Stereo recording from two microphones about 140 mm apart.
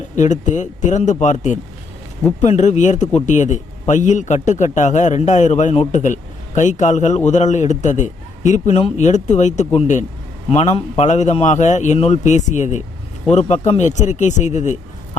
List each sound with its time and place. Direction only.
0.2 s a man's voice: 60° left (ahead or behind)